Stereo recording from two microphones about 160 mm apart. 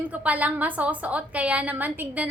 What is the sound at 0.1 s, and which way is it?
A woman's voice, 10° right (ahead or behind).